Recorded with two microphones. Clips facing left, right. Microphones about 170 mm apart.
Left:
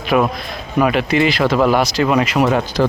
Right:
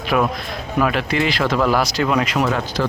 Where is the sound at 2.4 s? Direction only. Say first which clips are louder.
Left 5 dB; 20° left (ahead or behind).